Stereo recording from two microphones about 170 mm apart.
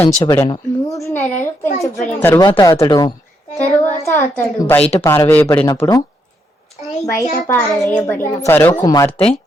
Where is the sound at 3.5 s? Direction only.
45° left (ahead or behind).